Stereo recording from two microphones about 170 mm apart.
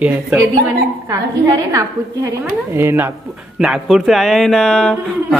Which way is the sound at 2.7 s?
15° right (ahead or behind).